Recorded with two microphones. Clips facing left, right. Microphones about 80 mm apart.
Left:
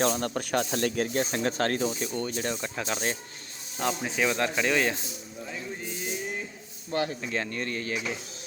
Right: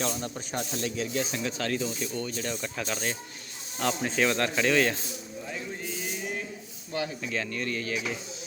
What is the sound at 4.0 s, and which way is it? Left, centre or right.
Speech, centre.